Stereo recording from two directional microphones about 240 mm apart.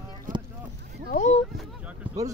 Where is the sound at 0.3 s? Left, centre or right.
Right.